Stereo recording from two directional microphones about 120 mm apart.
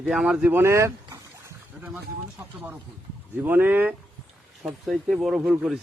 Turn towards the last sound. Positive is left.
turn(degrees=-5)  # may be behind; listen again after turning